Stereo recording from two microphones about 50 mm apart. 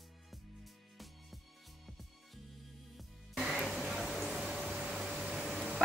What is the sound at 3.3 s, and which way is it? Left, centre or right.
Music, centre.